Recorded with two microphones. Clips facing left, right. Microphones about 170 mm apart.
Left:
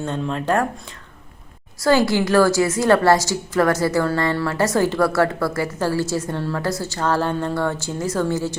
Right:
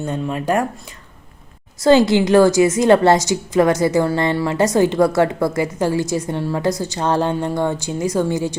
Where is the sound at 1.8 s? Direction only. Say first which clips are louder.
Right 4 dB; 20° right (ahead or behind).